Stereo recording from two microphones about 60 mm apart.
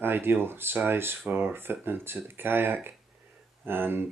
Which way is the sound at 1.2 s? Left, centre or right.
Right.